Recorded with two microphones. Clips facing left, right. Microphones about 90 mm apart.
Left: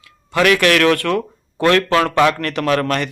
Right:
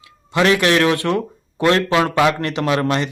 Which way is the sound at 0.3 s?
20° right (ahead or behind).